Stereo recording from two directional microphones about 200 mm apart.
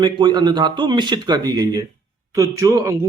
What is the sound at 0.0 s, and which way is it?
Speech, 20° right (ahead or behind).